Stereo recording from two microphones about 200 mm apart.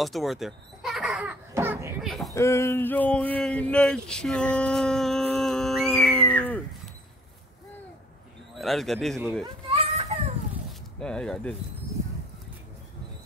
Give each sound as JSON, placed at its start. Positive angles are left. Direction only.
{"t": 0.0, "sound": "speech", "side_deg": 0}
{"t": 2.0, "sound": "chicken", "side_deg": 0}
{"t": 2.3, "sound": "speech", "side_deg": 15}
{"t": 8.5, "sound": "a man's voice", "side_deg": 0}
{"t": 9.7, "sound": "children playing", "side_deg": -30}
{"t": 11.0, "sound": "a man's voice", "side_deg": 5}